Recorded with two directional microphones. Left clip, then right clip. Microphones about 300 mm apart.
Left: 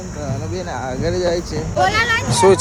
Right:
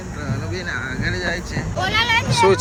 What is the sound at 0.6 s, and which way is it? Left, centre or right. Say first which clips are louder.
Speech: left 2 dB; centre.